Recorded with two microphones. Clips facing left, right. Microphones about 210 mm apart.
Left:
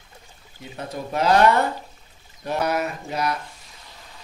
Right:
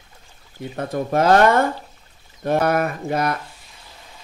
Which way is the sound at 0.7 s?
50° right (ahead or behind).